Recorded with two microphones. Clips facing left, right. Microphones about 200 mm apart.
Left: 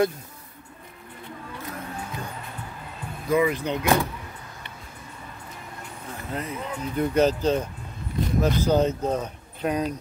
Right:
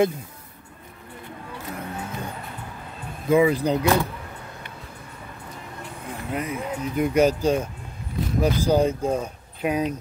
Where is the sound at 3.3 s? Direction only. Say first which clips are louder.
Right 4 dB; 30° right (ahead or behind).